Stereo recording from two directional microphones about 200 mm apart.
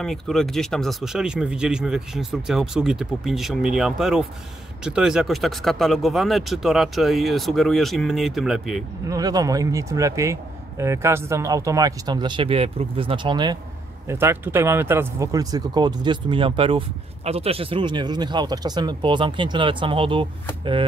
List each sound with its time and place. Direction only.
0.0 s speech: centre (ahead or behind)
9.0 s a man's voice: 20° right (ahead or behind)